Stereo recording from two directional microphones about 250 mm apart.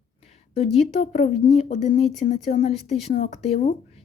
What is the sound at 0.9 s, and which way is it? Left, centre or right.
Speech, left.